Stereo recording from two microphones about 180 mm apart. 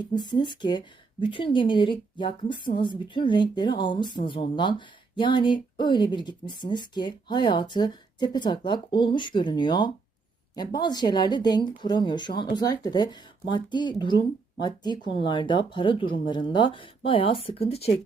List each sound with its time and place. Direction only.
0.1 s speech: 25° left (ahead or behind)